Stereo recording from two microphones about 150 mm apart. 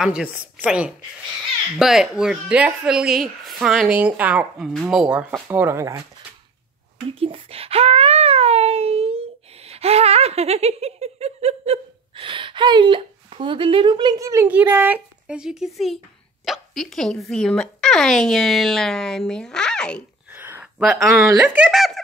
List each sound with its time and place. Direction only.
0.0 s a woman's voice: 5° right (ahead or behind)
5.3 s a woman's voice: 15° right (ahead or behind)
7.1 s wail: 40° right (ahead or behind)
9.7 s laughter: 45° right (ahead or behind); by 14.5 s 20° right (ahead or behind)
14.5 s speech: 10° right (ahead or behind); by 20.0 s 5° left (ahead or behind)
20.3 s a sound: 15° right (ahead or behind)
21.4 s speech: 5° right (ahead or behind)